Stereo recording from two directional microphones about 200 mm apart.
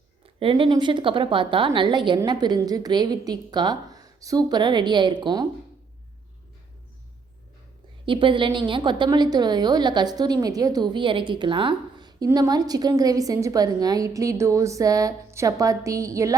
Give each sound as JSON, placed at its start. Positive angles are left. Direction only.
{"t": 0.3, "sound": "a woman's voice", "side_deg": -25}
{"t": 8.0, "sound": "a woman's voice", "side_deg": -25}